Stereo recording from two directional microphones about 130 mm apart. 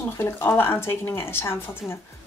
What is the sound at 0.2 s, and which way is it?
Speech, 15° left (ahead or behind).